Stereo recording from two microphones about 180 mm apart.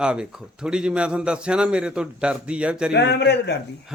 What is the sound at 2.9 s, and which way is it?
Speech, 70° left (ahead or behind).